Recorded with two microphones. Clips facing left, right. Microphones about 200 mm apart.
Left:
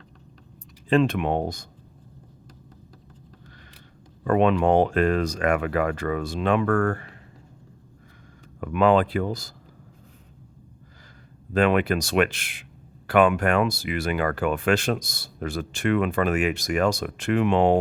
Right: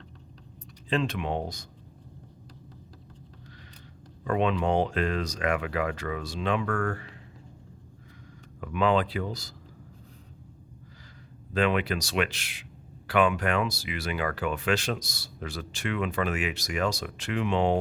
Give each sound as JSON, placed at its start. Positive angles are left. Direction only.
{"t": 0.9, "sound": "speech", "side_deg": 55}
{"t": 4.2, "sound": "speech", "side_deg": 50}
{"t": 8.6, "sound": "speech", "side_deg": 50}
{"t": 11.5, "sound": "speech", "side_deg": 50}